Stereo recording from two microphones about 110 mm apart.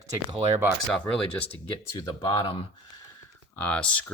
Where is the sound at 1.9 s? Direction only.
40° left (ahead or behind).